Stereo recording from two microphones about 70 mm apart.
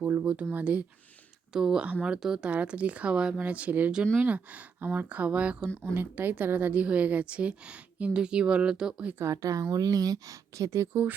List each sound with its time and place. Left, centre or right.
0.0 s speech: right
1.5 s a woman's voice: centre
1.9 s speech: right
2.2 s a woman's voice: centre
2.5 s speech: centre
5.9 s a woman's voice: right; by 9.1 s centre
9.1 s speech: right